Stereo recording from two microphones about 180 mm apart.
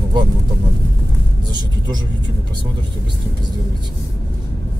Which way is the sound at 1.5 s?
25° right (ahead or behind).